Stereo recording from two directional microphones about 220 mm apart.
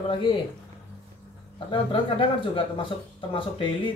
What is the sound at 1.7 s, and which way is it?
Speech, 25° left (ahead or behind).